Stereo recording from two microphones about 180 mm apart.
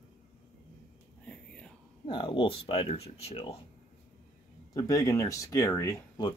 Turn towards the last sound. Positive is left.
turn(degrees=20)  # may be behind; listen again after turning